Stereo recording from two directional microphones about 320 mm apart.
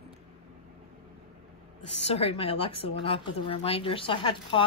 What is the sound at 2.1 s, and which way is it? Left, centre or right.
A woman's voice, centre.